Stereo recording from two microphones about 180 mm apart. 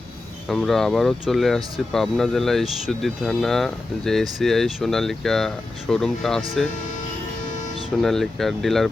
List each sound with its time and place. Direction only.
0.4 s speech: centre (ahead or behind)
8.0 s speech: centre (ahead or behind)